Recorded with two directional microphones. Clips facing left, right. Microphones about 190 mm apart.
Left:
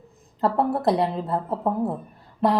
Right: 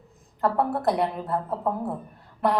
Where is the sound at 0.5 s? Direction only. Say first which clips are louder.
Left 3 dB; 25° left (ahead or behind).